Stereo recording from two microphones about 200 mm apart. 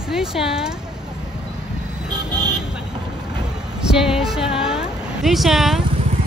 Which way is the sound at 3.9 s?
Centre (ahead or behind).